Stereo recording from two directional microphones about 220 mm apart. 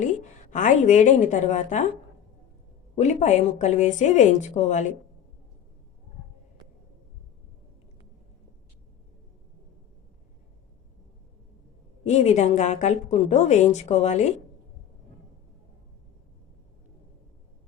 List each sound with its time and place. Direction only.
0.0 s a woman's voice: 35° left (ahead or behind)
2.9 s a woman's voice: 30° left (ahead or behind)
12.0 s a woman's voice: 30° left (ahead or behind)